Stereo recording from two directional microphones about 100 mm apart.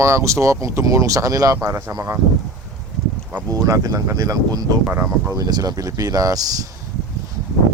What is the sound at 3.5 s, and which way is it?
Speech, 35° right (ahead or behind).